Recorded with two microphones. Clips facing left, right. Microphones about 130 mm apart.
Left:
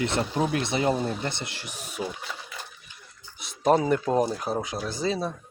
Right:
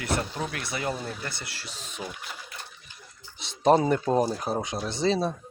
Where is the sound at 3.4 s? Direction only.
30° right (ahead or behind).